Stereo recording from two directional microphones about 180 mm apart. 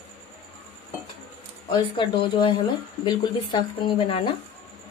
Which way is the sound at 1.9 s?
25° left (ahead or behind).